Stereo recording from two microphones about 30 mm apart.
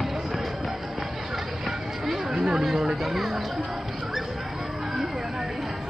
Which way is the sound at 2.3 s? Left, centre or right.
Right.